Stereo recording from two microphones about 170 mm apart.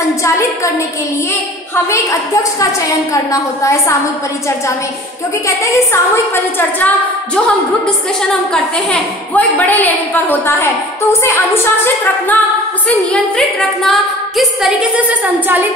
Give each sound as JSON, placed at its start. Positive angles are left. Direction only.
{"t": 1.9, "sound": "a woman's voice", "side_deg": 20}
{"t": 8.9, "sound": "a woman's voice", "side_deg": 10}
{"t": 13.1, "sound": "a woman's voice", "side_deg": 0}